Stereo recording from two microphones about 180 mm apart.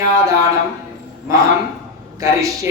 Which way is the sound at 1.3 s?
15° right (ahead or behind).